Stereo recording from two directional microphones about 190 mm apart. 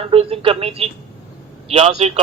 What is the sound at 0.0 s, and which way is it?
A man's voice, 30° right (ahead or behind).